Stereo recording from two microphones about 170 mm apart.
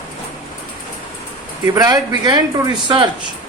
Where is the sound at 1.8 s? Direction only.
20° right (ahead or behind).